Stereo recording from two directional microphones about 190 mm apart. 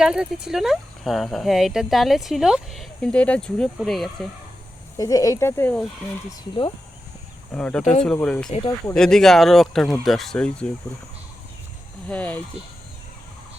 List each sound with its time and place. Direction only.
0.0 s speech: 5° right (ahead or behind)
4.9 s speech: 20° left (ahead or behind)
7.5 s speech: 5° left (ahead or behind)
8.4 s speech: 30° left (ahead or behind)
8.9 s speech: 5° left (ahead or behind)
12.0 s speech: 5° left (ahead or behind)